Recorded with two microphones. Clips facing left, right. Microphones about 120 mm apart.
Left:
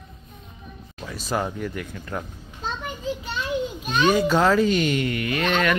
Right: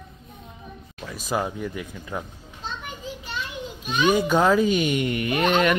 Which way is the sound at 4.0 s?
15° right (ahead or behind).